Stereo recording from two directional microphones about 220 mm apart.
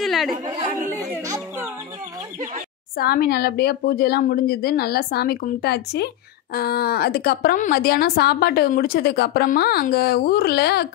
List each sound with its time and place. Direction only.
0.0 s chatter: centre (ahead or behind)
1.2 s a child's voice: 15° right (ahead or behind)
3.0 s a woman's voice: 45° left (ahead or behind)